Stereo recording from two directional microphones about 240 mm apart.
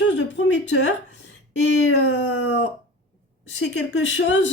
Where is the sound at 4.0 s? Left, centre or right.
Left.